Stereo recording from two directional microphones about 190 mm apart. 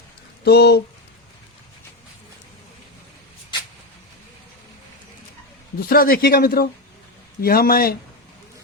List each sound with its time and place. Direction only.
0.4 s speech: 60° left (ahead or behind)
5.9 s speech: 50° left (ahead or behind)